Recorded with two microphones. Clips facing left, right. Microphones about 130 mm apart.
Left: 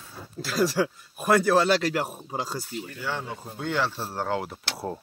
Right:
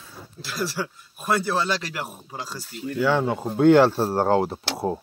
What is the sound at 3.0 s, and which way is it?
Speech, 80° right.